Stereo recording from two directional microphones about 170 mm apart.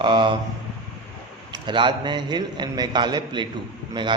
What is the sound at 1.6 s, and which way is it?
A man's voice, 25° right (ahead or behind).